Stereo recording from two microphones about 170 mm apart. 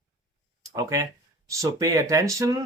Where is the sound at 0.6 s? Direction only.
20° right (ahead or behind).